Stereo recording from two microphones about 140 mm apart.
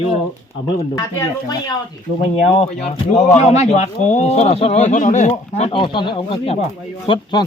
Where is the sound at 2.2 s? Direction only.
50° left (ahead or behind).